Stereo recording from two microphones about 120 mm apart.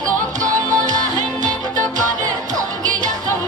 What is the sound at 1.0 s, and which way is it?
Music, 90° right.